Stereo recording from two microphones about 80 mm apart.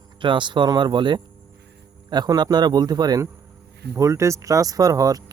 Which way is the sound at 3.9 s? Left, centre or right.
Right.